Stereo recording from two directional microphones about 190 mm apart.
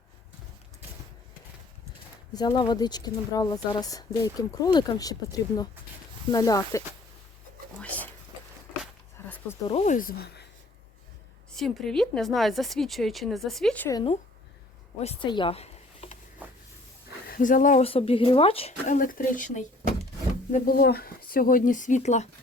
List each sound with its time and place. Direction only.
2.3 s speech: 20° left (ahead or behind)
7.8 s a sound: 10° left (ahead or behind)
9.2 s a sound: 10° left (ahead or behind)
9.6 s speech: 35° left (ahead or behind); by 10.4 s 60° left (ahead or behind)
11.5 s speech: centre (ahead or behind)
13.9 s speech: 25° left (ahead or behind)
16.4 s vehicle: 10° right (ahead or behind)
17.2 s speech: 45° left (ahead or behind); by 18.9 s 30° left (ahead or behind)
18.9 s speech: 45° left (ahead or behind)
20.5 s speech: 50° left (ahead or behind)